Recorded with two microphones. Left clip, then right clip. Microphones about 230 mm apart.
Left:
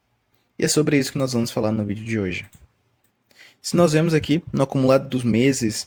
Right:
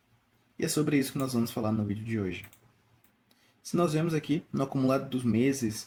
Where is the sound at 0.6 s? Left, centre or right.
Left.